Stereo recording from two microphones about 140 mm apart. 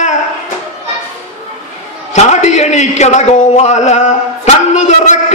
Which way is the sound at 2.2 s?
55° left (ahead or behind).